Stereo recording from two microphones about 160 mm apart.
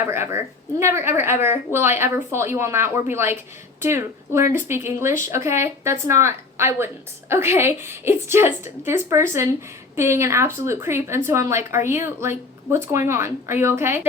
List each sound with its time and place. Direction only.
0.0 s speech: 15° right (ahead or behind)